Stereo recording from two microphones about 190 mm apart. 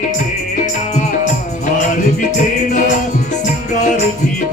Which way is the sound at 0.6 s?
40° left (ahead or behind).